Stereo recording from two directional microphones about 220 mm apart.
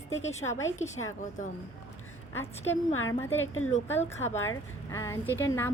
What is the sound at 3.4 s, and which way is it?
Speech, 65° left (ahead or behind).